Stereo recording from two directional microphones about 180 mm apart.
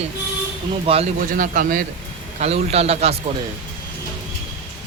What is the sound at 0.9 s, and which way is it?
Speech, 30° right (ahead or behind).